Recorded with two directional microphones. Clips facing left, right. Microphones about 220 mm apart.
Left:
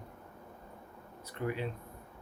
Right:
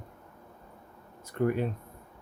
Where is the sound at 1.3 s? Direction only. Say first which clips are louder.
Right 8 dB; 50° right (ahead or behind).